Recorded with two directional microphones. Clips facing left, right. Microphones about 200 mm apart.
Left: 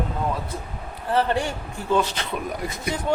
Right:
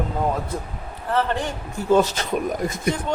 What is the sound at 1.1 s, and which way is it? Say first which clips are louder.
Speech: left 1 dB; 15° left (ahead or behind).